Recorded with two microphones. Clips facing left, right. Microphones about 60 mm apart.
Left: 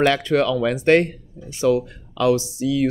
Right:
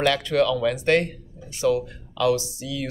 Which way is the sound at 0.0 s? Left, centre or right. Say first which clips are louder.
Left 3 dB; left.